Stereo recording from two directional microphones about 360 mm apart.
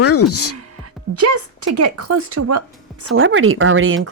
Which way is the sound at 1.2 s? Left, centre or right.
Right.